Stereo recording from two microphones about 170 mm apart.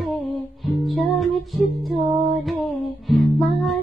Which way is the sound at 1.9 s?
35° right (ahead or behind).